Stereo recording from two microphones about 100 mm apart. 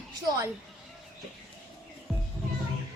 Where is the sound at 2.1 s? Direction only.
10° right (ahead or behind).